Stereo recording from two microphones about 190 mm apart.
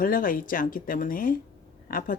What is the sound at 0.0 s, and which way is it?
Speech, 50° left (ahead or behind).